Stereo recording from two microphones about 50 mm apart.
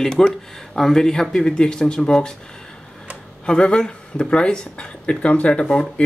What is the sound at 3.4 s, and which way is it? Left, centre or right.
Speech, centre.